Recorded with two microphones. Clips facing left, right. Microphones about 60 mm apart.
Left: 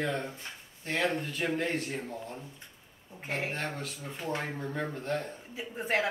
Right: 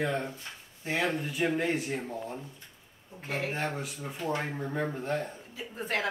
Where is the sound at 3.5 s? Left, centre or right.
Centre.